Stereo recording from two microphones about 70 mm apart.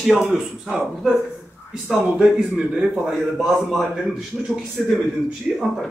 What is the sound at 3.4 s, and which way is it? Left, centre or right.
Speech, centre.